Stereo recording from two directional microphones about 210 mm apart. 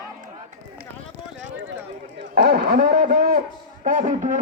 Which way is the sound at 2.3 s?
50° right (ahead or behind).